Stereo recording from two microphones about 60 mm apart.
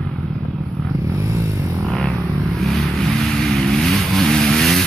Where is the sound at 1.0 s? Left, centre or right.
Right.